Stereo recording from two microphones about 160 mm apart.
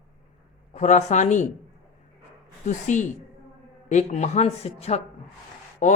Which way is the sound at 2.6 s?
50° left (ahead or behind).